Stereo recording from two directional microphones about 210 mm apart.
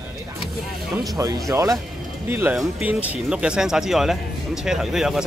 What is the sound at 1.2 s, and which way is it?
Speech, 15° right (ahead or behind).